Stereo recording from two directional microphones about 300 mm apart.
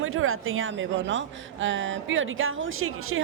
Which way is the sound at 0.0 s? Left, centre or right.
Right.